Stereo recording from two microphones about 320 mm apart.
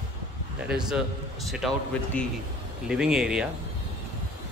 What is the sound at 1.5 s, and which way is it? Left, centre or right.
Speech, centre.